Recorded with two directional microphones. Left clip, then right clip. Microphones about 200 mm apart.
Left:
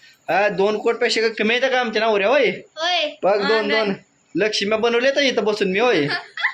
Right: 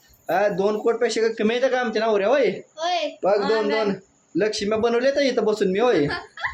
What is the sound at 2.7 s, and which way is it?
Speech, 5° right (ahead or behind).